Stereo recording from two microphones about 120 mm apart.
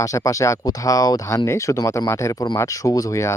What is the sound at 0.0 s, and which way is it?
Speech, 25° left (ahead or behind).